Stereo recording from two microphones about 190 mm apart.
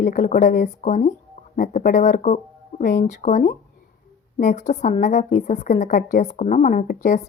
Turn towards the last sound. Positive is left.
turn(degrees=45)  # may be behind; listen again after turning